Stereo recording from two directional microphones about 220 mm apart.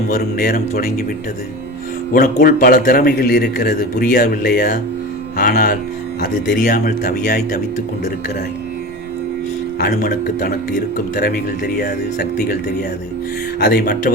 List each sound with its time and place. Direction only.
0.1 s a man's voice: 40° left (ahead or behind)
2.4 s speech: 40° left (ahead or behind)
9.8 s a man's voice: 40° left (ahead or behind)
13.6 s a man's voice: 45° left (ahead or behind)